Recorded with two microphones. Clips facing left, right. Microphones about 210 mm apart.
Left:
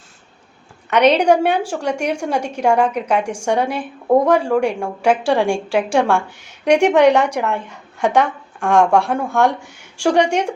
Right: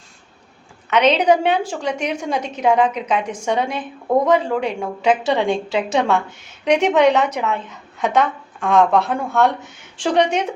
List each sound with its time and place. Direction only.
0.9 s a woman's voice: 10° left (ahead or behind)